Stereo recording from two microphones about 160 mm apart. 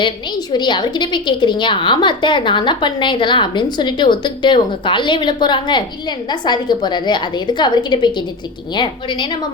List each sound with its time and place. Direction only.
0.0 s a woman's voice: 25° left (ahead or behind)